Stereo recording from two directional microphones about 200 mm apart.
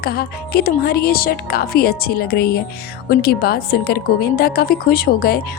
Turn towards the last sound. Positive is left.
turn(degrees=50)  # may be behind; listen again after turning